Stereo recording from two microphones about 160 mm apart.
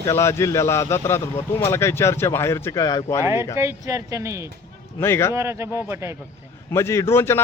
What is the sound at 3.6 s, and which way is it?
Speech, 20° right (ahead or behind).